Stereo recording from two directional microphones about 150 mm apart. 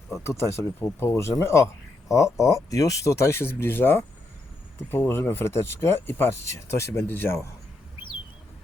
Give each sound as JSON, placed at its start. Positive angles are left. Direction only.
{"t": 0.1, "sound": "speech", "side_deg": 15}